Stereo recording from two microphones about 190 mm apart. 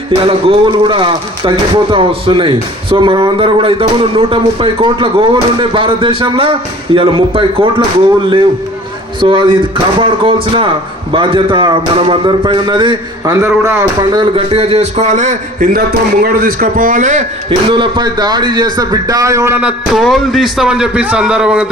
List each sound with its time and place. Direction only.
0.2 s speech: 30° right (ahead or behind)
9.2 s speech: 25° right (ahead or behind)
14.2 s a man's voice: 30° right (ahead or behind)
15.9 s a man's voice: 50° right (ahead or behind)
17.5 s a man's voice: 25° right (ahead or behind); by 21.7 s 5° right (ahead or behind)